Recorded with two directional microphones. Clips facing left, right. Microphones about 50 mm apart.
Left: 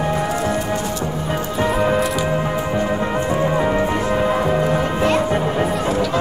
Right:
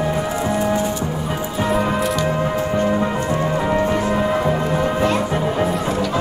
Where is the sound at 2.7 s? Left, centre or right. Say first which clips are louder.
Right 1 dB; centre.